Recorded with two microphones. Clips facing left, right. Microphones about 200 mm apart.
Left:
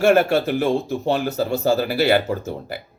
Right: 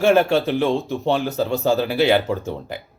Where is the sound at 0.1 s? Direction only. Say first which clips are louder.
Even; 15° left (ahead or behind).